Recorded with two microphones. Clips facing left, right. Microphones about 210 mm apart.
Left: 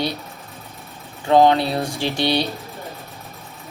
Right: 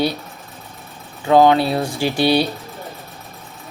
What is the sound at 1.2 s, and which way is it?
Speech, 30° left (ahead or behind).